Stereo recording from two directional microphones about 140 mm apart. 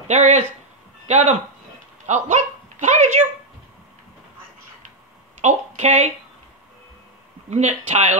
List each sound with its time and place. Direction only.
0.1 s speech: 50° right (ahead or behind)
5.4 s a woman's voice: 55° right (ahead or behind)
7.4 s speech: 55° right (ahead or behind)